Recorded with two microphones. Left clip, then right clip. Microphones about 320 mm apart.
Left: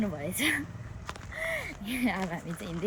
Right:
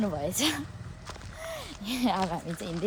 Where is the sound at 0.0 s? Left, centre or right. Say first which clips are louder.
Right 2 dB; centre.